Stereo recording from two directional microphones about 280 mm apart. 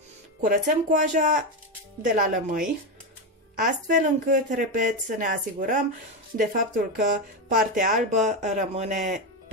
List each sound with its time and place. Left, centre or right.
0.4 s speech: right